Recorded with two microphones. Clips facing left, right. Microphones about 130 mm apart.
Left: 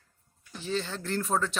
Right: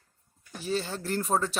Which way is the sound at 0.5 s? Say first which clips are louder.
Right 1 dB; 10° right (ahead or behind).